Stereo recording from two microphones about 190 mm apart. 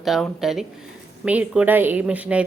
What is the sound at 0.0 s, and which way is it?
A woman's voice, centre (ahead or behind).